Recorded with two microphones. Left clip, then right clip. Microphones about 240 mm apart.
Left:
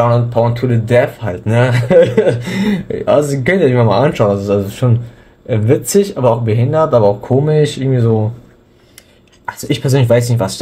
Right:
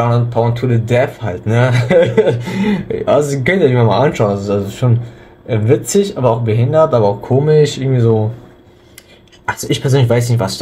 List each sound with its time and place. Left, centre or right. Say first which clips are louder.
0.0 s speech: left 3 dB; centre
9.5 s speech: right 1 dB; centre